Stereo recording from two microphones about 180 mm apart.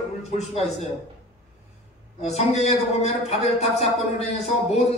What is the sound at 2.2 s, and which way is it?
A man's voice, 35° left (ahead or behind).